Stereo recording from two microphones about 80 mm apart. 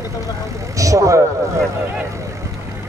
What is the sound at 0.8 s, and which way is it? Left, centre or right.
Vehicle, right.